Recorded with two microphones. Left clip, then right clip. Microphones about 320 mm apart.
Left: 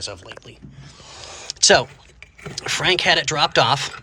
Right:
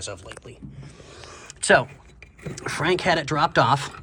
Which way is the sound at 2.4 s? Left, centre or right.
Centre.